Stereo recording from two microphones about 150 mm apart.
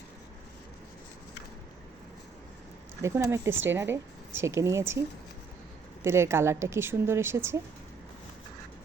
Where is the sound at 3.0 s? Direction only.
20° right (ahead or behind).